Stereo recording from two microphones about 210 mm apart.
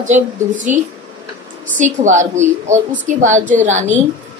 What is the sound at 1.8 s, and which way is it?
A woman's voice, 35° right (ahead or behind).